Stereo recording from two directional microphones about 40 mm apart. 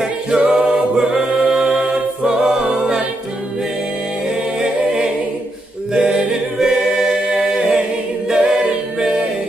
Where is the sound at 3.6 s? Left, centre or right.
Centre.